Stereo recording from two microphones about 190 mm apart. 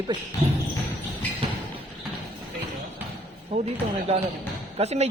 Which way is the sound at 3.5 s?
35° right (ahead or behind).